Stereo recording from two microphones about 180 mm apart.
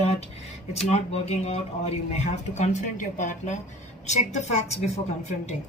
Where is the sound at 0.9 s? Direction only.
40° left (ahead or behind).